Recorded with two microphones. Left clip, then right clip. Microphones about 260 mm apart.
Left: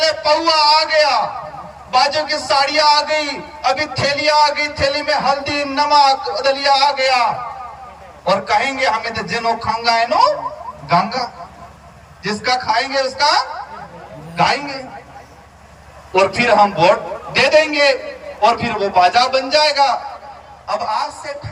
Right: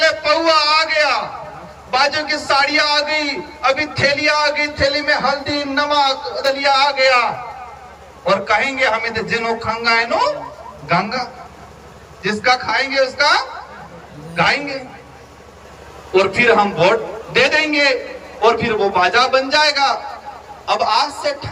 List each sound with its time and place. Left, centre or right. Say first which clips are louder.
0.0 s a sound: even; centre
1.9 s a man's voice: left 1 dB; centre
12.2 s a man's voice: right 2 dB; centre
16.1 s a man's voice: even; centre
20.7 s a man's voice: right 4 dB; right